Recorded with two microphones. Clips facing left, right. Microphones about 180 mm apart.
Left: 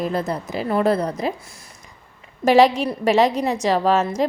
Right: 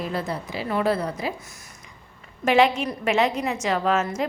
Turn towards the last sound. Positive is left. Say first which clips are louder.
# left 5 dB
turn(degrees=35)  # may be behind; listen again after turning